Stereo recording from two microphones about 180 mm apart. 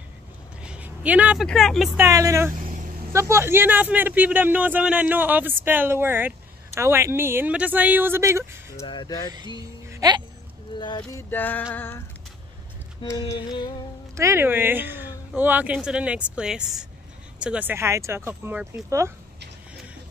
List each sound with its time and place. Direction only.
0.7 s speech: 10° right (ahead or behind)
2.0 s a man's voice: 15° right (ahead or behind)
8.8 s mantra: 25° left (ahead or behind)
9.8 s music: 20° right (ahead or behind)
10.8 s mantra: 25° left (ahead or behind)
11.2 s music: 10° left (ahead or behind)
13.0 s mantra: 20° left (ahead or behind)
14.1 s a man's voice: 15° right (ahead or behind)